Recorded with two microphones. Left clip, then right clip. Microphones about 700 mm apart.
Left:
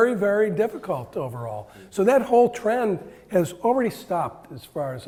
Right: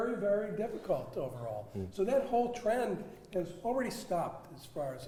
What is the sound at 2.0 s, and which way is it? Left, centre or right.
A man's voice, left.